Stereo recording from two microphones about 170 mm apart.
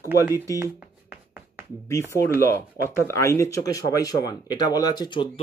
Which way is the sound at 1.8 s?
15° left (ahead or behind).